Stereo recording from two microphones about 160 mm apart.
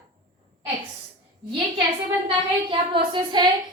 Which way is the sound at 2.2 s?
35° right (ahead or behind).